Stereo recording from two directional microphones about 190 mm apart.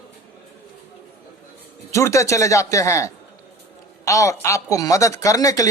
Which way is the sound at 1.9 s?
15° left (ahead or behind).